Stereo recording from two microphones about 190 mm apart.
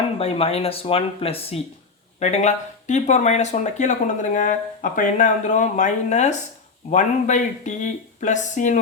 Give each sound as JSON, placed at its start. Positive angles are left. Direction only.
{"t": 0.2, "sound": "speech", "side_deg": 30}